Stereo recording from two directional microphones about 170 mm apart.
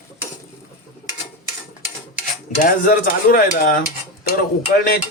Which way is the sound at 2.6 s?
55° left (ahead or behind).